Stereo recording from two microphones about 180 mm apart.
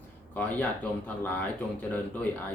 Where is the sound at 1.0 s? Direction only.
10° left (ahead or behind).